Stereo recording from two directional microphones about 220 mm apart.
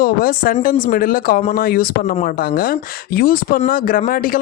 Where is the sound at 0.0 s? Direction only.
40° left (ahead or behind).